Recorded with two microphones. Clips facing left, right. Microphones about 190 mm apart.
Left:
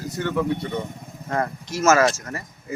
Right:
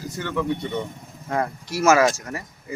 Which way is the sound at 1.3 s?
10° right (ahead or behind).